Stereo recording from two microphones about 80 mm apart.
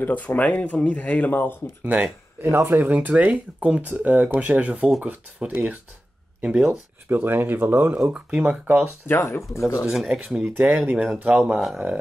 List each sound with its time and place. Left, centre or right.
0.0 s speech: left
1.9 s speech: centre
2.4 s speech: right; by 6.8 s centre
7.1 s speech: right
7.9 s speech: centre
9.0 s speech: left
9.8 s speech: centre